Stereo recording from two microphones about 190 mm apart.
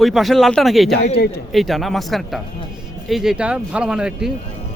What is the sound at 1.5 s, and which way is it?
A man's voice, centre (ahead or behind).